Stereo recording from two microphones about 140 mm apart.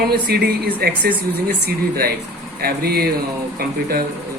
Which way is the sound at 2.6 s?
90° right.